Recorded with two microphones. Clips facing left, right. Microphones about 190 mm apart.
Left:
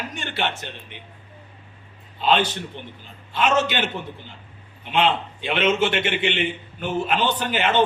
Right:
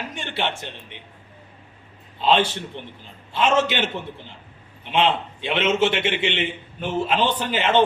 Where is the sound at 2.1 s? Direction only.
25° right (ahead or behind).